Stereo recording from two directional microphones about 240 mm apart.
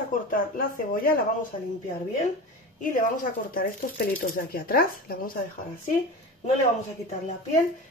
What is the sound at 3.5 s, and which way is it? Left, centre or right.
Speech, left.